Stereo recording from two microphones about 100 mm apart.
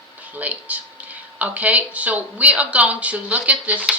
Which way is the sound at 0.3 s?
15° right (ahead or behind).